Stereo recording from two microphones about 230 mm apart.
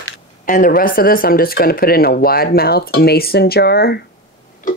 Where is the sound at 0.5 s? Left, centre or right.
Left.